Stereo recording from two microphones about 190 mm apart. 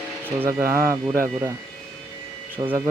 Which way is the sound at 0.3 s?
10° right (ahead or behind).